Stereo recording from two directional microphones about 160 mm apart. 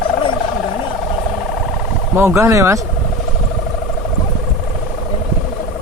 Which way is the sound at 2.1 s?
15° right (ahead or behind).